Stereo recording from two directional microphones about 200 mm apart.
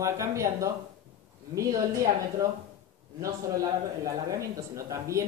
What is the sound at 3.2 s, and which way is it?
Speech, 15° right (ahead or behind).